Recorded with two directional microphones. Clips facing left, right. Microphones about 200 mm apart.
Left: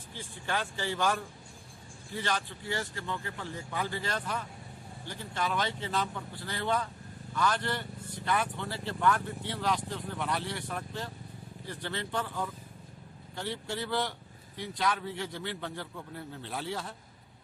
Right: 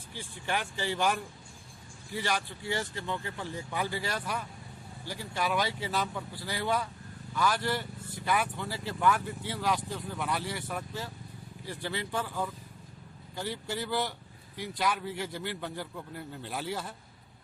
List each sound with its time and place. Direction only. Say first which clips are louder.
0.2 s a man's voice: right 1 dB; 15° right (ahead or behind)